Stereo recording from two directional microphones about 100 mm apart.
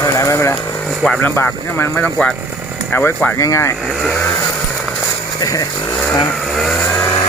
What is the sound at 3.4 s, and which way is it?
Speech, 30° left (ahead or behind).